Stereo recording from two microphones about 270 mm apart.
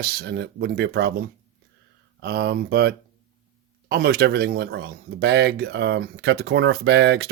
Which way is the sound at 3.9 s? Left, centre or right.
Right.